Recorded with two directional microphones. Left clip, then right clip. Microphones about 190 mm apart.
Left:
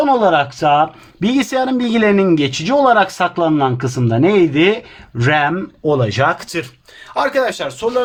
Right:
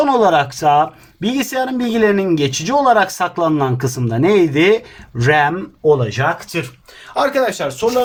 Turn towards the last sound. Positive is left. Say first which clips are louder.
# right 1 dB
turn(degrees=10)  # may be behind; listen again after turning